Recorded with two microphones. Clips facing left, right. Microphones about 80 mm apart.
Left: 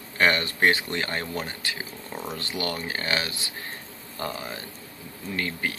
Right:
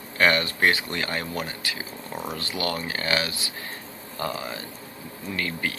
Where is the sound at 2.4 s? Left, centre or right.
Left.